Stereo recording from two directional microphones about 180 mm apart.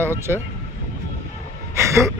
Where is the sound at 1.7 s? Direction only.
15° right (ahead or behind).